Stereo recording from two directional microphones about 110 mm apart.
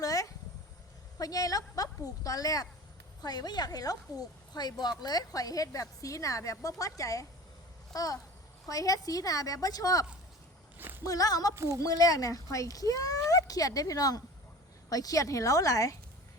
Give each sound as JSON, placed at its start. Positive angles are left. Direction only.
{"t": 0.0, "sound": "a sound", "side_deg": 30}
{"t": 1.2, "sound": "a woman's voice", "side_deg": 30}
{"t": 11.5, "sound": "speech", "side_deg": -25}
{"t": 11.8, "sound": "a woman's voice", "side_deg": 35}